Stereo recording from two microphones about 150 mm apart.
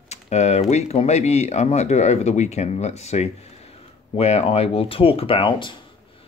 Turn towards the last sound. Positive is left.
turn(degrees=35)  # may be behind; listen again after turning